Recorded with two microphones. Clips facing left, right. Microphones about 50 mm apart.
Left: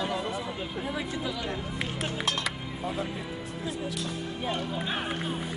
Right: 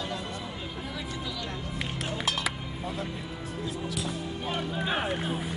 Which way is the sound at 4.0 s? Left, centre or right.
Centre.